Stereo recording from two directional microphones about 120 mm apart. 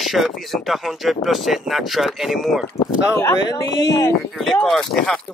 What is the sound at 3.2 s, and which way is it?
Speech, 20° left (ahead or behind).